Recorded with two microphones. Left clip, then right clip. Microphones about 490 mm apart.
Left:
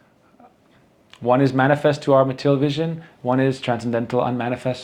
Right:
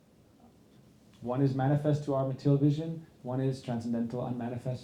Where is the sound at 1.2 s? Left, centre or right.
Left.